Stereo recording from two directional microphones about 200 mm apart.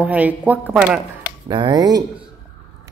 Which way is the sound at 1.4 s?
20° right (ahead or behind).